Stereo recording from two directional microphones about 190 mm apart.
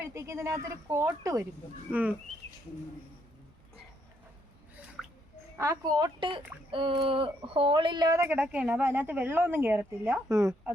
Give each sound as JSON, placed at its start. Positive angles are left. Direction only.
{"t": 0.0, "sound": "speech", "side_deg": -15}
{"t": 5.0, "sound": "a sound", "side_deg": 0}
{"t": 5.5, "sound": "speech", "side_deg": -15}